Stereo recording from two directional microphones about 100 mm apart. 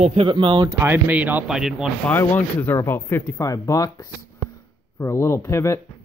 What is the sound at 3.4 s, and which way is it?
Speech, 35° left (ahead or behind).